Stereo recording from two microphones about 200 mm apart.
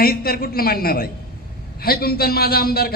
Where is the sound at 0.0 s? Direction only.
50° left (ahead or behind).